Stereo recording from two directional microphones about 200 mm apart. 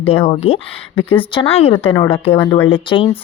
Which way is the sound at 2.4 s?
10° left (ahead or behind).